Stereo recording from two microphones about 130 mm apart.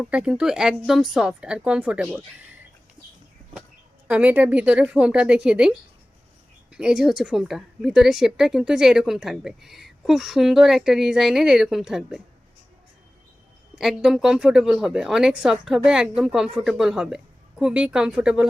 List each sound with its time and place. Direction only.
0.0 s a woman's voice: 5° right (ahead or behind)
4.1 s a woman's voice: 10° right (ahead or behind)
13.7 s a woman's voice: 5° right (ahead or behind)